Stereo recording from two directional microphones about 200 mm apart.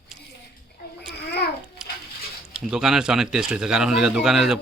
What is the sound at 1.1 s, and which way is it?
Babbling, 55° left (ahead or behind).